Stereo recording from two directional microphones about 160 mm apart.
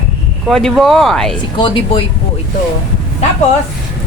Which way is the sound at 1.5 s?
30° left (ahead or behind).